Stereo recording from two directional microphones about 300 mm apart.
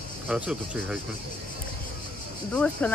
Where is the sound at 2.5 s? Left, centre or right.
Centre.